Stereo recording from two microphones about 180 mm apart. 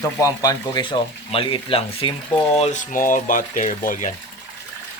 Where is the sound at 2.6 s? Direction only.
40° left (ahead or behind).